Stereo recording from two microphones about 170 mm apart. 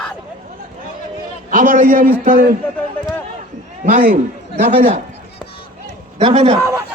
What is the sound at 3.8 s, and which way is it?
A man's voice, 50° right (ahead or behind).